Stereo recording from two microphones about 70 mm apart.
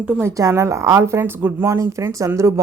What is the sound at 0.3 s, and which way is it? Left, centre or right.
Speech, right.